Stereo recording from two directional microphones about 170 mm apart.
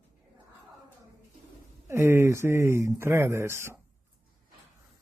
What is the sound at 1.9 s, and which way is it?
Speech, 15° right (ahead or behind).